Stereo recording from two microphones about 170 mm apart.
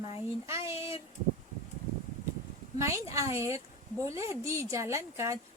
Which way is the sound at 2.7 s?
15° right (ahead or behind).